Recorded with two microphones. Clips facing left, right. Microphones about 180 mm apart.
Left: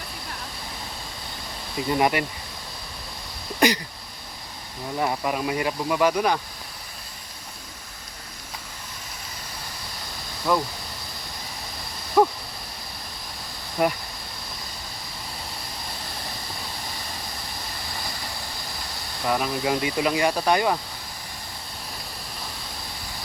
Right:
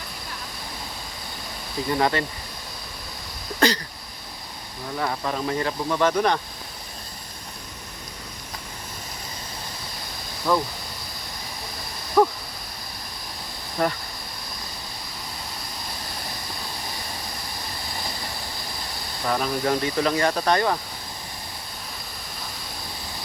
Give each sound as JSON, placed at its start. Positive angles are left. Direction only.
{"t": 1.9, "sound": "speech", "side_deg": 15}
{"t": 3.6, "sound": "speech", "side_deg": 15}
{"t": 4.9, "sound": "speech", "side_deg": 15}
{"t": 10.5, "sound": "speech", "side_deg": 10}
{"t": 12.2, "sound": "a sound", "side_deg": 10}
{"t": 13.8, "sound": "speech", "side_deg": 10}
{"t": 19.3, "sound": "speech", "side_deg": 5}